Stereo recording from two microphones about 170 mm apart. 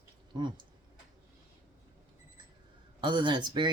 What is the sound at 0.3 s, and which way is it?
Speech, 25° right (ahead or behind).